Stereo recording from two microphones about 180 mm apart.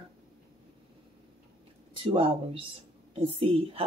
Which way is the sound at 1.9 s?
30° right (ahead or behind).